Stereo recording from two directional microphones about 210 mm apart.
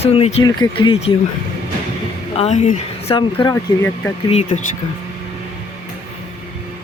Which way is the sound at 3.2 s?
20° left (ahead or behind).